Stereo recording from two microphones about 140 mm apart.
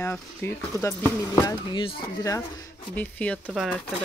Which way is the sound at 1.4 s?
35° left (ahead or behind).